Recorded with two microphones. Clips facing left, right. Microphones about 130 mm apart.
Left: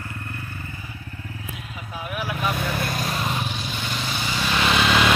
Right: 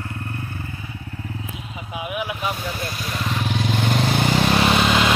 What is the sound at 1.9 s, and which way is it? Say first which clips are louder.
Vehicle: right 3 dB; 15° right (ahead or behind).